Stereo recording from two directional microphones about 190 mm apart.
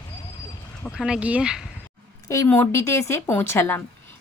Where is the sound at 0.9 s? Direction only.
5° right (ahead or behind).